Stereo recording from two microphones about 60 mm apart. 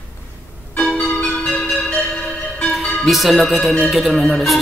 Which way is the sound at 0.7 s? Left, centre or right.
Left.